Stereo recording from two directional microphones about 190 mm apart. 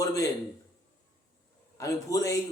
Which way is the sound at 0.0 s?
20° left (ahead or behind).